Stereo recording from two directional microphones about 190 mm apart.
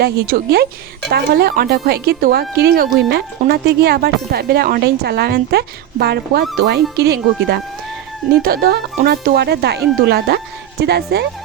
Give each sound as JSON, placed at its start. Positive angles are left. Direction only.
{"t": 0.0, "sound": "speech", "side_deg": -55}